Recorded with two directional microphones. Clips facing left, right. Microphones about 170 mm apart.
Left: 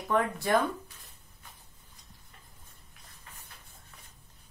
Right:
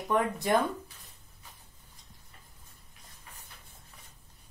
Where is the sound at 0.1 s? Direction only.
20° right (ahead or behind).